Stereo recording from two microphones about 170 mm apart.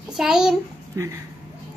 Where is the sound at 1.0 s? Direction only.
20° right (ahead or behind).